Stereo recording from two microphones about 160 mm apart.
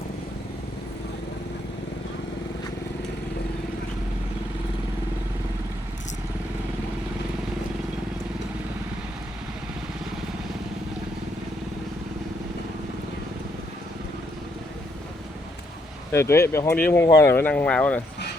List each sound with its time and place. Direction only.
16.1 s speech: 15° left (ahead or behind)